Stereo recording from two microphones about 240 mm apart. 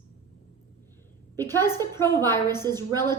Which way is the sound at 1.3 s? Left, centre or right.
Centre.